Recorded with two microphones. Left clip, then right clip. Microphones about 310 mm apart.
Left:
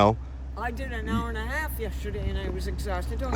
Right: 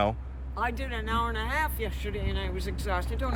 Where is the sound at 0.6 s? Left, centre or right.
Centre.